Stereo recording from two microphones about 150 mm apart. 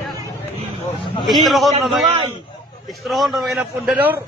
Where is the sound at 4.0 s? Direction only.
10° right (ahead or behind).